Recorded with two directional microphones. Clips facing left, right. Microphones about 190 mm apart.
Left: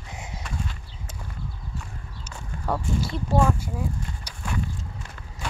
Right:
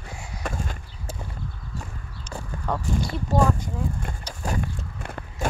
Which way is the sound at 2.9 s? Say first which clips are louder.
Right 1 dB; centre (ahead or behind).